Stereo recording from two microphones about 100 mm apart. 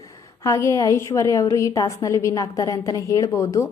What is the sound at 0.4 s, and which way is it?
A woman's voice, 30° left (ahead or behind).